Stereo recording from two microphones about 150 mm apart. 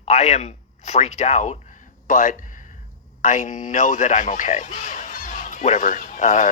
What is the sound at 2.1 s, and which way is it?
A man's voice, 60° left (ahead or behind).